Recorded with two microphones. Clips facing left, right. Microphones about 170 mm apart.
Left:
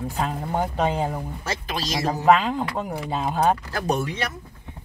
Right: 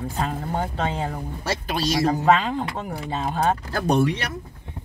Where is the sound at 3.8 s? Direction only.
65° right (ahead or behind).